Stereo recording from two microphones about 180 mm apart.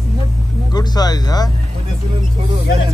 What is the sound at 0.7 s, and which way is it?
Speech, 20° left (ahead or behind).